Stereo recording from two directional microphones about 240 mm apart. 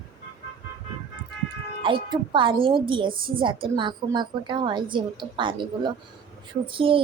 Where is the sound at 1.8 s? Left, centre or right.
Right.